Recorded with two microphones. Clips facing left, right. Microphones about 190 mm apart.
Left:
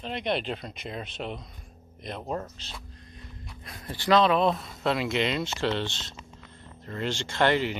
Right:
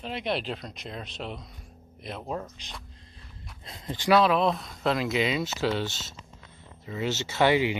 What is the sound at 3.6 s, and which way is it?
Speech, 20° right (ahead or behind).